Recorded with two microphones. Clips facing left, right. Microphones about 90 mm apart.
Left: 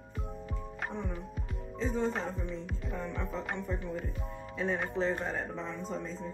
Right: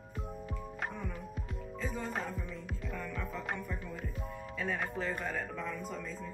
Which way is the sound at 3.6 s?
Centre (ahead or behind).